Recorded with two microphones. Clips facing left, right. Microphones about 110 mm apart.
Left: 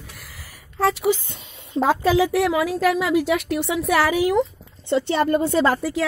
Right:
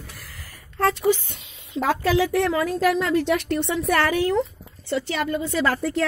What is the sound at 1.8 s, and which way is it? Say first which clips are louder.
Speech: left 2 dB; 20° left (ahead or behind).